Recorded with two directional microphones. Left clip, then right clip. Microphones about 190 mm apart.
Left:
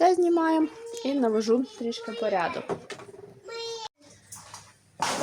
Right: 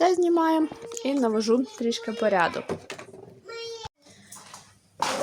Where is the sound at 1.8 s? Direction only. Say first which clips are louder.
Right 4 dB; 30° right (ahead or behind).